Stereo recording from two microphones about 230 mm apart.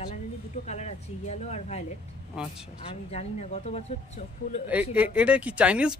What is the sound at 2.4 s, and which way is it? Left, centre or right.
Speech, centre.